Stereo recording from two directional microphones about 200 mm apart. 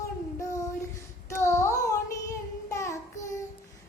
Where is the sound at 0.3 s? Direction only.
15° left (ahead or behind).